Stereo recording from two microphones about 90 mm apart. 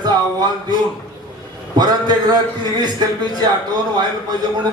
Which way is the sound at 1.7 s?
50° right (ahead or behind).